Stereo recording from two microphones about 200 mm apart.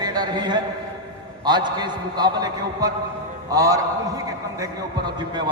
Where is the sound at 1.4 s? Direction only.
20° right (ahead or behind).